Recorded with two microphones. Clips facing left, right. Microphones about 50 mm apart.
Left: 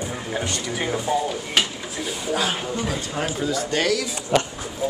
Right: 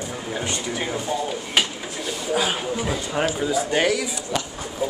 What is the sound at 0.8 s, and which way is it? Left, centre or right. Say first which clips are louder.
Speech: left 5 dB; centre.